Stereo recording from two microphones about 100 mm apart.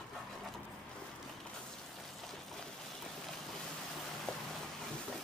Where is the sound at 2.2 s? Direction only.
Centre (ahead or behind).